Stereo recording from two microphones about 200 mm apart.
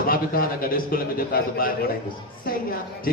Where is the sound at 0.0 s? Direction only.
45° left (ahead or behind).